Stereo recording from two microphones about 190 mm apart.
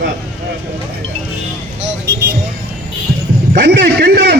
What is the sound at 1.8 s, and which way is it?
Vehicle, 60° right (ahead or behind).